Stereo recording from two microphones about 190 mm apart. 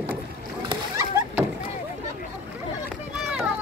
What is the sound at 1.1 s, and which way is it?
Vehicle, 15° right (ahead or behind).